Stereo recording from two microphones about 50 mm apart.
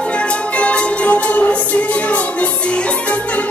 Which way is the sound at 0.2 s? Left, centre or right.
Left.